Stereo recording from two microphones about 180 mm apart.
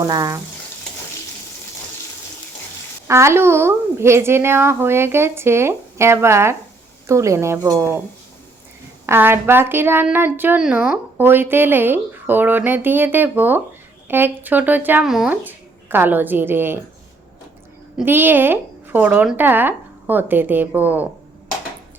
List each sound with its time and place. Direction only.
0.0 s speech: 20° right (ahead or behind)
3.1 s speech: 15° right (ahead or behind)
9.0 s speech: 10° right (ahead or behind)
17.9 s speech: 10° right (ahead or behind)